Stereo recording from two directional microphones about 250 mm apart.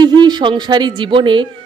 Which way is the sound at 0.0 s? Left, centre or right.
Centre.